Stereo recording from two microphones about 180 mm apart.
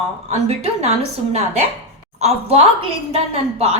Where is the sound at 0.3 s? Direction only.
35° right (ahead or behind).